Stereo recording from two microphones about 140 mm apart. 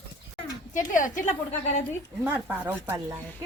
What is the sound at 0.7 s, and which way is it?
Speech, 70° left (ahead or behind).